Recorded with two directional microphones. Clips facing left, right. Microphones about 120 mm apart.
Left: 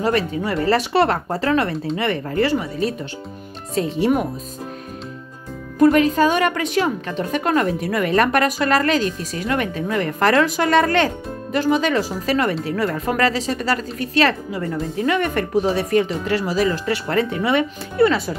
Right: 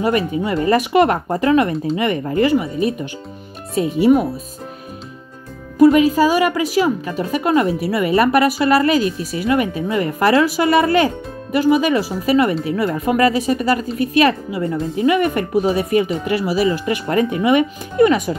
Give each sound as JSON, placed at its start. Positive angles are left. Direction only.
{"t": 0.0, "sound": "speech", "side_deg": -15}
{"t": 5.8, "sound": "speech", "side_deg": -5}